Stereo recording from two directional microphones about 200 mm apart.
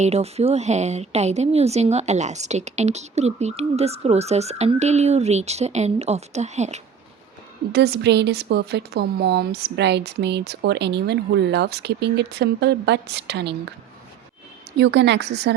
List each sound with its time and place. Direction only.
0.0 s a woman's voice: 30° right (ahead or behind)
7.7 s a woman's voice: 55° right (ahead or behind)
14.8 s a woman's voice: 60° right (ahead or behind)